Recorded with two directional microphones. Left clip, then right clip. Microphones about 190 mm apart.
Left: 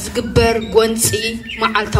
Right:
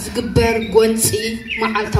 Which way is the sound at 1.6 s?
35° right (ahead or behind).